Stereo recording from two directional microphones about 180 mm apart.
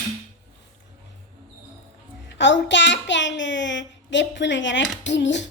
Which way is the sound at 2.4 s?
80° left.